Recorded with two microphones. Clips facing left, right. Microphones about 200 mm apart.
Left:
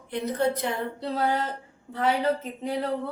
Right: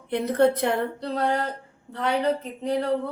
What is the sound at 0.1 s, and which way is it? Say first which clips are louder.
Speech: right 5 dB; 60° right (ahead or behind).